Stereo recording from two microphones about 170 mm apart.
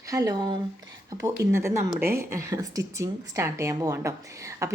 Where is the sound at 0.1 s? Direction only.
20° right (ahead or behind).